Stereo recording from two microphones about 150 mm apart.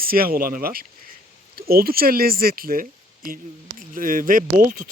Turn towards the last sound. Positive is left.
turn(degrees=-65)  # may be behind; listen again after turning